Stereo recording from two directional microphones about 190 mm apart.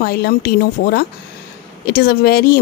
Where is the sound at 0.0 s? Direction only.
55° left (ahead or behind).